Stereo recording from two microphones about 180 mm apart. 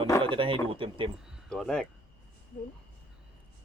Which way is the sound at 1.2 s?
Centre (ahead or behind).